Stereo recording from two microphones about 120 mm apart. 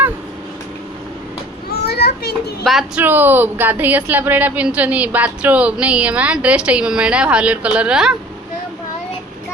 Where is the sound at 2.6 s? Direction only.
Centre (ahead or behind).